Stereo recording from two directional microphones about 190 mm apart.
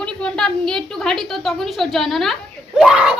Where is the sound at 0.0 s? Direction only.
5° left (ahead or behind).